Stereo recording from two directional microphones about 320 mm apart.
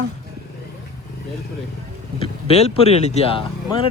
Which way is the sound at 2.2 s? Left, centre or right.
Centre.